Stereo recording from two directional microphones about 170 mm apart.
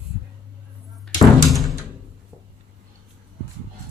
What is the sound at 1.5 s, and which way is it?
Music, centre (ahead or behind).